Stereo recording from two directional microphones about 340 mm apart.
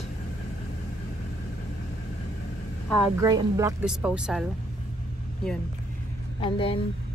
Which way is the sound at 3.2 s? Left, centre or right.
Centre.